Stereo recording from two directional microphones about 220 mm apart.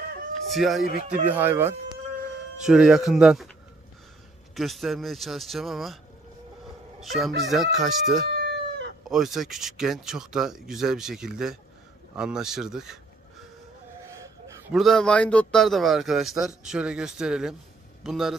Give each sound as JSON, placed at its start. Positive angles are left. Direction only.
{"t": 0.5, "sound": "speech", "side_deg": 0}
{"t": 4.6, "sound": "speech", "side_deg": 0}
{"t": 7.0, "sound": "speech", "side_deg": 0}
{"t": 8.3, "sound": "chicken", "side_deg": -50}
{"t": 9.1, "sound": "speech", "side_deg": 0}
{"t": 14.7, "sound": "speech", "side_deg": 0}